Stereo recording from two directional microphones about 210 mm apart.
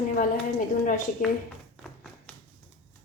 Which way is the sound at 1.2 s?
40° left (ahead or behind).